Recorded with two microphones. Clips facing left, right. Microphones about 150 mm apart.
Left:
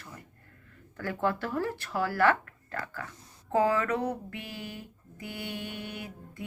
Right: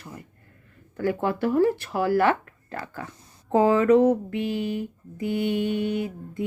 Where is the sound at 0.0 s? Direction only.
15° right (ahead or behind).